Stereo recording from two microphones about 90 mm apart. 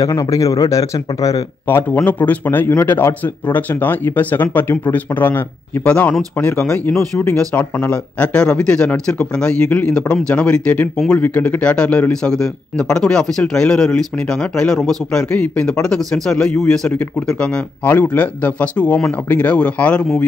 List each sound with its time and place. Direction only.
0.0 s speech: 40° left (ahead or behind)
1.7 s speech: 25° left (ahead or behind)